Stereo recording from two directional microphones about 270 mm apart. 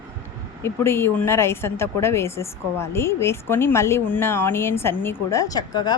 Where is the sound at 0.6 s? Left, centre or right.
Centre.